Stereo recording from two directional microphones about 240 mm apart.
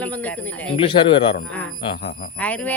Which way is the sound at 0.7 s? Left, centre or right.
Left.